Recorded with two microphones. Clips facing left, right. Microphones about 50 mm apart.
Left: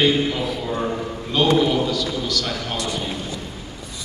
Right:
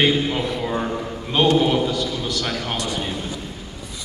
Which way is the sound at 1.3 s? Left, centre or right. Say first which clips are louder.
Right 1 dB; right.